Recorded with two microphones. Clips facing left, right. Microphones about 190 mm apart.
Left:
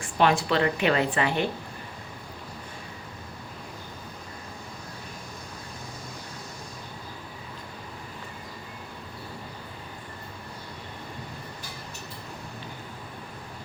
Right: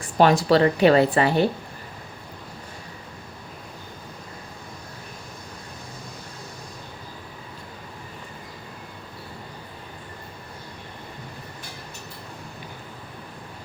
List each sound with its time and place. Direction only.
0.0 s a woman's voice: 40° right (ahead or behind)